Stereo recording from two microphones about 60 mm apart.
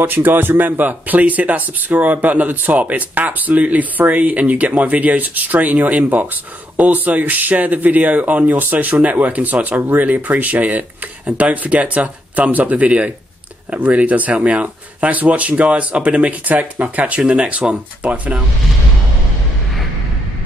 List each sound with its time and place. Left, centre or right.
0.0 s speech: right